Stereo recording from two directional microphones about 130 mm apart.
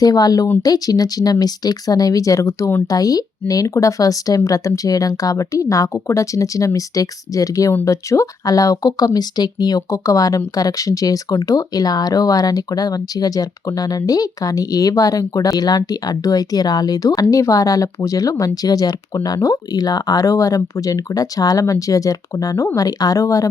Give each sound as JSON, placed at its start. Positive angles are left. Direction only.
{"t": 0.0, "sound": "speech", "side_deg": 30}